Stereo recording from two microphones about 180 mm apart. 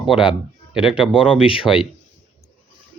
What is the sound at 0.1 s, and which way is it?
Speech, 25° left (ahead or behind).